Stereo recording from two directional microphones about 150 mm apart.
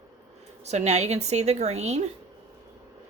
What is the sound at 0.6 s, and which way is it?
A woman's voice, 50° right (ahead or behind).